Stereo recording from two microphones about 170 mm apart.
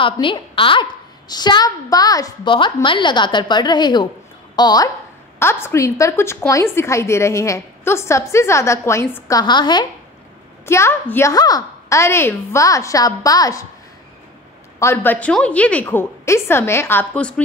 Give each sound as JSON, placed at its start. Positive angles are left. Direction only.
{"t": 0.0, "sound": "a woman's voice", "side_deg": 30}
{"t": 5.4, "sound": "a woman's voice", "side_deg": 15}
{"t": 10.6, "sound": "a woman's voice", "side_deg": 15}
{"t": 14.8, "sound": "a woman's voice", "side_deg": 15}